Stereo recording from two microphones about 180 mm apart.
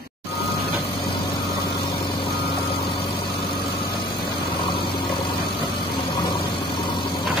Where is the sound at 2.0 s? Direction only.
30° left (ahead or behind).